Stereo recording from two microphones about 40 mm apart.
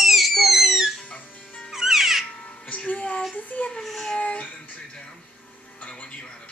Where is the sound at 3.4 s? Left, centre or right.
Left.